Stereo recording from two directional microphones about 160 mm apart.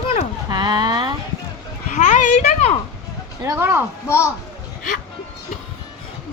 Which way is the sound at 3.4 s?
15° right (ahead or behind).